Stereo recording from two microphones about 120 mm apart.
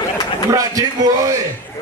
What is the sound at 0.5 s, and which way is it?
Speech, 30° right (ahead or behind).